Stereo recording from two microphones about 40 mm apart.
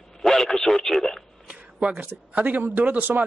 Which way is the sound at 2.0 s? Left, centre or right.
Right.